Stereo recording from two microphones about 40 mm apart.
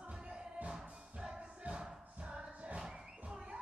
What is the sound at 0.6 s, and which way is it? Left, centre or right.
Music, right.